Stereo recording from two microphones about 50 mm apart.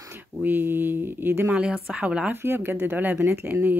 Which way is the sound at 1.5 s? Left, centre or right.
Centre.